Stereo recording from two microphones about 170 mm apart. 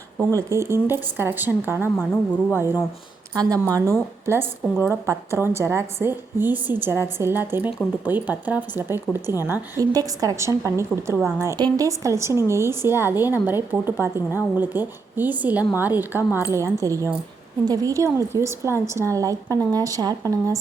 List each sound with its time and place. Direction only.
0.2 s a woman's voice: 15° right (ahead or behind)